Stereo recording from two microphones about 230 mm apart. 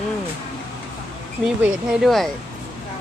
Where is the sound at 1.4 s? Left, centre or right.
Centre.